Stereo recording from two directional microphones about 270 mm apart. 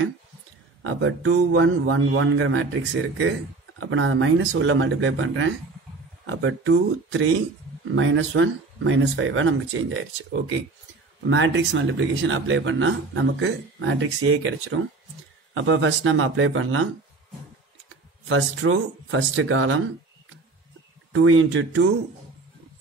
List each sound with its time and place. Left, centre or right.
0.8 s speech: right
18.3 s speech: right
21.1 s speech: right